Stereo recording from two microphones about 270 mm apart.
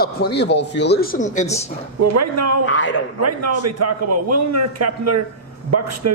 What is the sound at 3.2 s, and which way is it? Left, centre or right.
A man's voice, right.